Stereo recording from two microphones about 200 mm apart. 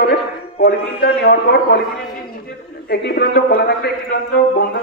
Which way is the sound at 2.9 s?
55° left (ahead or behind).